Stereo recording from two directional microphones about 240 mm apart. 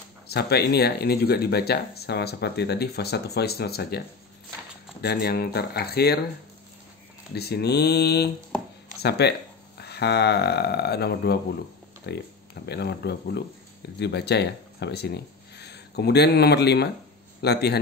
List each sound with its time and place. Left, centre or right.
0.3 s speech: left
5.0 s speech: left
7.3 s speech: left